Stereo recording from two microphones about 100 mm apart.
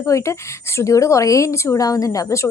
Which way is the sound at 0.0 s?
30° left (ahead or behind).